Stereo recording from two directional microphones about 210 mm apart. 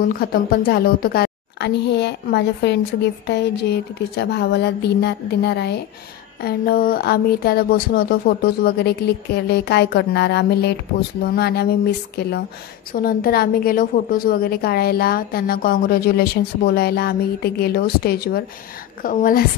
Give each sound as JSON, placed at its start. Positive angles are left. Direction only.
{"t": 0.0, "sound": "a woman's voice", "side_deg": 45}